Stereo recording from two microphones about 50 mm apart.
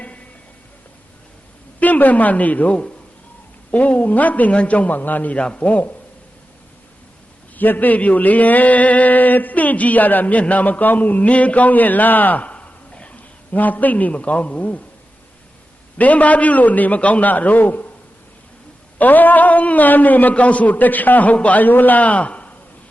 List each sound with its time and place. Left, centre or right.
1.8 s a man's voice: left
7.5 s speech: left
16.0 s speech: left
18.9 s speech: left